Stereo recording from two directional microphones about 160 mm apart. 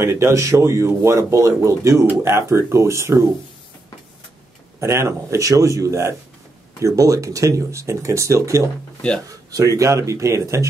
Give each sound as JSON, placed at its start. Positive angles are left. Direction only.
{"t": 0.0, "sound": "speech", "side_deg": -15}
{"t": 4.7, "sound": "speech", "side_deg": -15}